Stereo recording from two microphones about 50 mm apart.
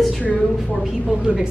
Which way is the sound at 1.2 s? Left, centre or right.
Centre.